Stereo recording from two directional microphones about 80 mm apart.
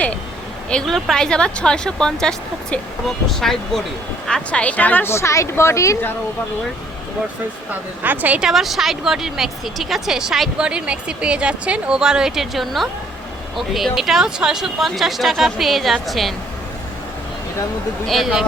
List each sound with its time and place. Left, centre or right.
0.7 s speech: centre; by 5.1 s left
5.1 s speech: left
8.0 s a woman's voice: right
8.4 s a woman's voice: centre
18.0 s speech: centre